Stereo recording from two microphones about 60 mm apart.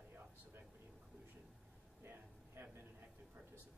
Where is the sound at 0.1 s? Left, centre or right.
Right.